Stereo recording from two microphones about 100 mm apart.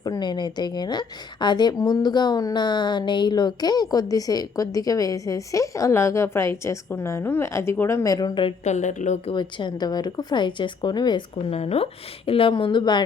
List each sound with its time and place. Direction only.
0.0 s a woman's voice: 45° left (ahead or behind)
9.3 s speech: 50° left (ahead or behind)
11.5 s a woman's voice: 85° left; by 13.0 s 50° left (ahead or behind)